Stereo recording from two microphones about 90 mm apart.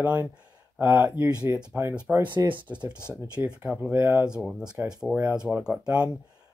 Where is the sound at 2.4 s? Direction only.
15° right (ahead or behind).